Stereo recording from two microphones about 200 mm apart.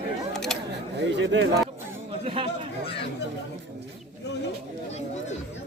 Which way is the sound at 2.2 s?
25° right (ahead or behind).